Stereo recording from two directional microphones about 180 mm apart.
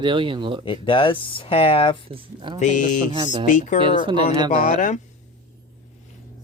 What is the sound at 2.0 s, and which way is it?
Speech, 30° right (ahead or behind).